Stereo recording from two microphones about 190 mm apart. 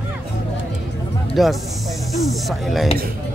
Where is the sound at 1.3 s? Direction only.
Centre (ahead or behind).